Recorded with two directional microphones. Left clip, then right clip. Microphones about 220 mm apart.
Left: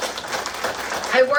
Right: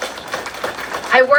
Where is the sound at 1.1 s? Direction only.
10° right (ahead or behind).